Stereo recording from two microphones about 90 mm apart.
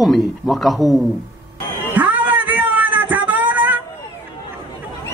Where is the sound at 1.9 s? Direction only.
15° right (ahead or behind).